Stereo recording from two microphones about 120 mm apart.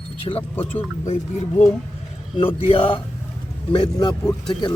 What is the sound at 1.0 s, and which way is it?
Speech, 65° left (ahead or behind).